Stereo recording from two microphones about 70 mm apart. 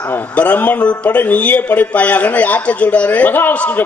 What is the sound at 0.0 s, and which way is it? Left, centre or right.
A man's voice, left.